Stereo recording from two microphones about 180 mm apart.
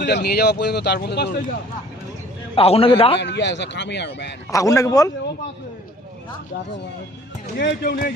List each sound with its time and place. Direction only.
0.0 s speech: 60° left (ahead or behind)
2.6 s a man's voice: 30° left (ahead or behind)
3.2 s speech: 75° left (ahead or behind)
4.5 s speech: 20° left (ahead or behind)
7.6 s speech: 65° left (ahead or behind)